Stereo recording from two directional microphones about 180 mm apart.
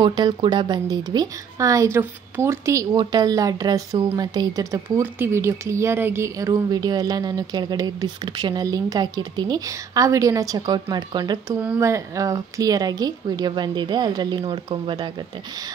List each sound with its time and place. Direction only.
0.0 s speech: 25° right (ahead or behind)
11.6 s speech: 10° right (ahead or behind)